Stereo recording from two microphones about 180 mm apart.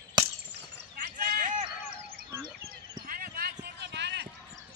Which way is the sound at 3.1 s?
55° right (ahead or behind).